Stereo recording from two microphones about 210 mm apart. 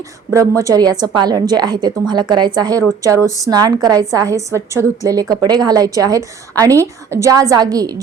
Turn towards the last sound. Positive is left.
turn(degrees=-15)  # may be behind; listen again after turning